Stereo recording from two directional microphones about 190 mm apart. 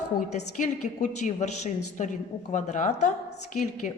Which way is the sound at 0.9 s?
40° left (ahead or behind).